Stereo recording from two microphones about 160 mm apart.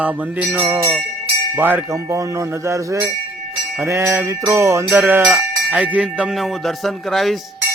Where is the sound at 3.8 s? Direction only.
15° right (ahead or behind).